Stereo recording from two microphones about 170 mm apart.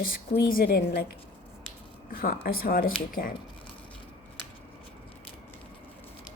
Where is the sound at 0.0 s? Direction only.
55° left (ahead or behind).